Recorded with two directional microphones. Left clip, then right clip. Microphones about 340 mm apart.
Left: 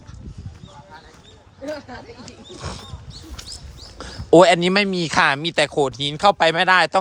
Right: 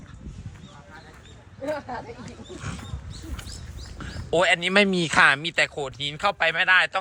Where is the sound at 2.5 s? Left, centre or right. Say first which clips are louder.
Left 5 dB; centre.